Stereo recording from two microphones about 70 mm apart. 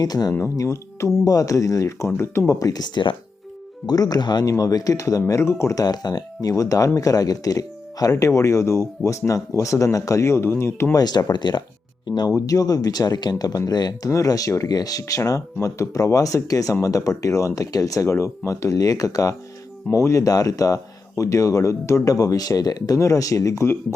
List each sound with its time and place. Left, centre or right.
0.0 s speech: left
0.5 s speech: left
2.5 s speech: left
4.4 s speech: left
5.3 s speech: left
5.7 s speech: left
6.5 s speech: left
10.9 s speech: left
12.3 s speech: left
14.1 s speech: left
23.0 s speech: left